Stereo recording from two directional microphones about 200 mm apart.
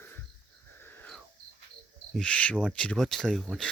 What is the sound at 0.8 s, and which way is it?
Wheeze, 5° left (ahead or behind).